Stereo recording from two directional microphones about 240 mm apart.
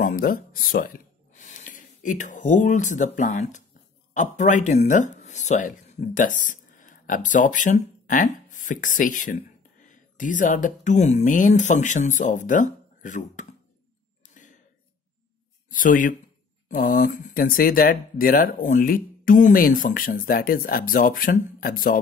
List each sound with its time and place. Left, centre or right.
0.0 s speech: left
14.2 s a sound: left
15.7 s speech: left